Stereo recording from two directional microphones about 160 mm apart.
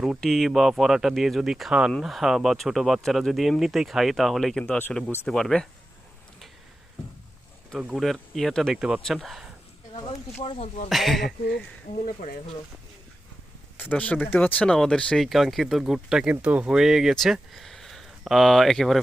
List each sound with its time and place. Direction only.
0.0 s speech: centre (ahead or behind)
7.7 s speech: 5° right (ahead or behind)
10.3 s speech: 40° left (ahead or behind)
10.8 s speech: centre (ahead or behind)
12.0 s speech: 65° left (ahead or behind)
13.7 s speech: 10° left (ahead or behind)